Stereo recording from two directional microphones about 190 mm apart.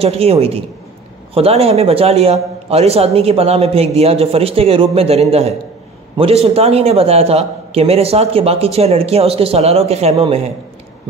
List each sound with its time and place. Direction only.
0.0 s a man's voice: 30° right (ahead or behind)